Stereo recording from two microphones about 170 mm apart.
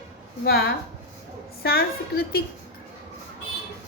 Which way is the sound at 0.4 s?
65° left (ahead or behind).